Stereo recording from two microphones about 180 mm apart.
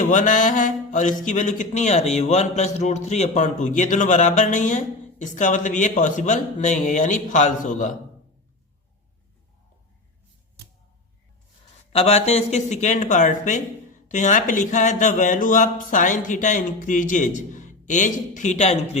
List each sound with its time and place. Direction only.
0.0 s speech: 45° left (ahead or behind)
11.9 s speech: 35° left (ahead or behind)